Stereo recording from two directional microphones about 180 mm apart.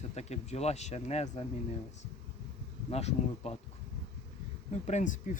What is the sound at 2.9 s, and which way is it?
Speech, 35° left (ahead or behind).